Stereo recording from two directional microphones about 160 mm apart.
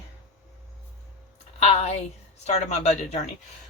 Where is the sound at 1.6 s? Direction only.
40° left (ahead or behind).